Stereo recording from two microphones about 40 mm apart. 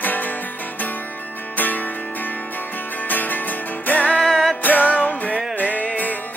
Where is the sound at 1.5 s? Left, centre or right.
Left.